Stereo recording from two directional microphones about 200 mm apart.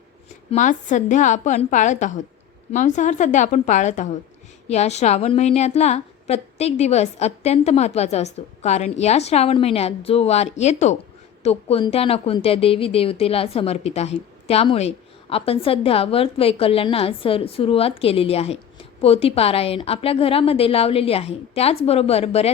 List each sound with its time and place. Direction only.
0.5 s a woman's voice: 40° left (ahead or behind)